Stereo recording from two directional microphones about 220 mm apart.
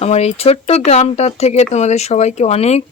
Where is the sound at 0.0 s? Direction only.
30° left (ahead or behind).